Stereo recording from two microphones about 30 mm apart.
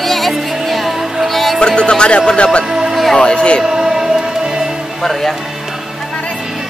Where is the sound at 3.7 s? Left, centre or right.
Centre.